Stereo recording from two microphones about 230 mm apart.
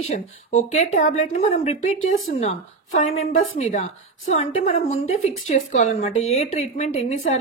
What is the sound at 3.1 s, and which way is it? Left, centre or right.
A woman's voice, left.